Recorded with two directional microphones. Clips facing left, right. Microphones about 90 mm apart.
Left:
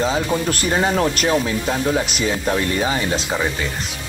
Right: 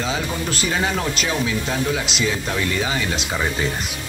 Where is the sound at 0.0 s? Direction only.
45° left (ahead or behind).